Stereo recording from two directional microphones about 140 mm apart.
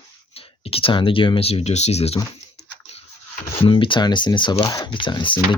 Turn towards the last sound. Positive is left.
turn(degrees=35)  # may be behind; listen again after turning